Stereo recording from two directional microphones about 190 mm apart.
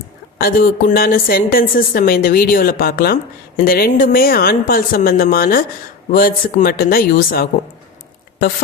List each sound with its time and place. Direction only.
0.3 s a woman's voice: 50° left (ahead or behind)